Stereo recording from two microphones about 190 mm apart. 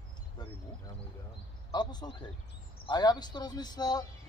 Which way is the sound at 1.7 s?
20° left (ahead or behind).